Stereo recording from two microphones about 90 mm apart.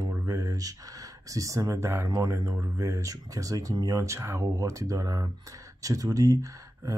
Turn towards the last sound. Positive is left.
turn(degrees=-40)  # may be behind; listen again after turning